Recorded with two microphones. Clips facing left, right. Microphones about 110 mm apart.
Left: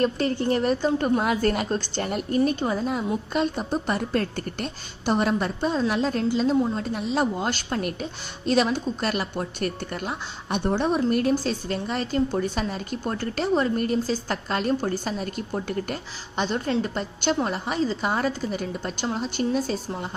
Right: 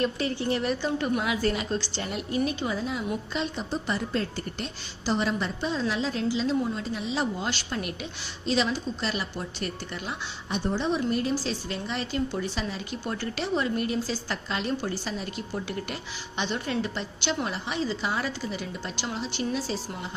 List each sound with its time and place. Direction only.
0.0 s a woman's voice: 45° left (ahead or behind)